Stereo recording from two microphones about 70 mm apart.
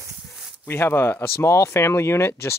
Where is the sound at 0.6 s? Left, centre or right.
Left.